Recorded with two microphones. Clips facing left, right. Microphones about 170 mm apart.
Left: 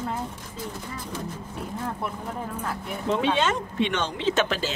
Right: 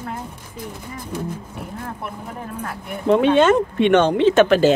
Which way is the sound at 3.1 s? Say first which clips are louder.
Right 10 dB; 55° right (ahead or behind).